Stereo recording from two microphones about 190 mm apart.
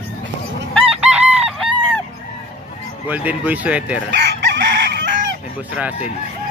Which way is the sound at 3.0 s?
10° right (ahead or behind).